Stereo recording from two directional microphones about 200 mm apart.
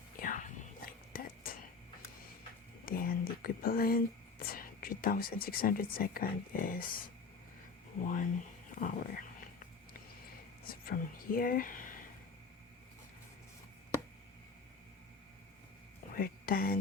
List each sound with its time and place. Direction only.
0.2 s whispering: 40° left (ahead or behind)
2.8 s speech: 45° left (ahead or behind)
8.0 s a sound: 40° left (ahead or behind)
10.7 s speech: 45° left (ahead or behind)
16.1 s speech: 45° left (ahead or behind)